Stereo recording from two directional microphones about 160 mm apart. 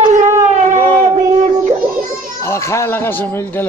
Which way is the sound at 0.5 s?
45° right (ahead or behind).